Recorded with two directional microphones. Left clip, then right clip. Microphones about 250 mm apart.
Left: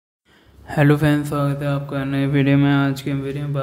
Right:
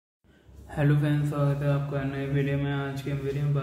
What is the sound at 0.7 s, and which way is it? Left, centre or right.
Mantra, left.